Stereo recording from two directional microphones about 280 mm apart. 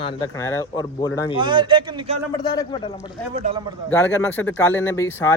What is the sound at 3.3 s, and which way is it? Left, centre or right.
Speech, right.